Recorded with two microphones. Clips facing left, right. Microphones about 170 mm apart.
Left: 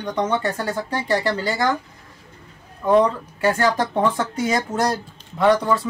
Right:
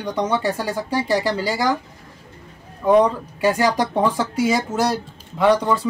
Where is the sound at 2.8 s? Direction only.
15° right (ahead or behind).